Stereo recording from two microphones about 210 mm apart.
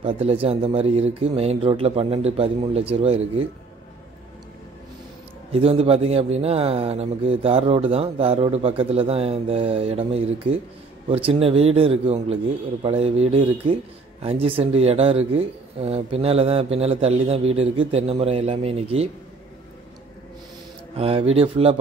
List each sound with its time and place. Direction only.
0.0 s speech: 25° right (ahead or behind)
5.5 s speech: 30° right (ahead or behind)
20.9 s speech: 25° right (ahead or behind)